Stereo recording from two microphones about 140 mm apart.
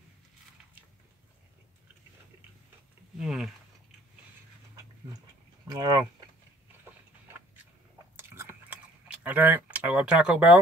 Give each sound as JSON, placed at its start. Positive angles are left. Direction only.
{"t": 3.2, "sound": "speech", "side_deg": -5}
{"t": 5.7, "sound": "speech", "side_deg": -30}
{"t": 8.2, "sound": "chewing", "side_deg": -15}
{"t": 9.0, "sound": "speech", "side_deg": -10}